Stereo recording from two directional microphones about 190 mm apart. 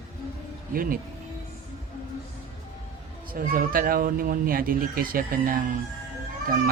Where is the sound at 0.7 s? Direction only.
50° right (ahead or behind).